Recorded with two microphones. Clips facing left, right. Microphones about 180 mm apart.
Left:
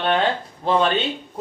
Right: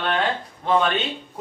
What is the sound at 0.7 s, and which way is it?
Speech, 30° left (ahead or behind).